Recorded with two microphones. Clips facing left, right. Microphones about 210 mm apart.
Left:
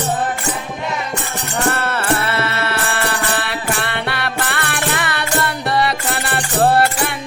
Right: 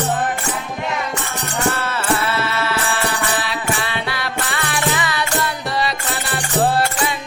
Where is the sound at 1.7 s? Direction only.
60° left (ahead or behind).